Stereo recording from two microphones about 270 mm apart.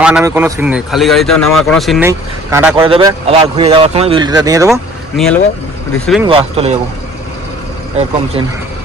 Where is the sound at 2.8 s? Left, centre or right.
Centre.